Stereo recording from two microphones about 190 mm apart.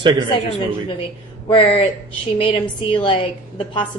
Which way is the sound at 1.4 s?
30° left (ahead or behind).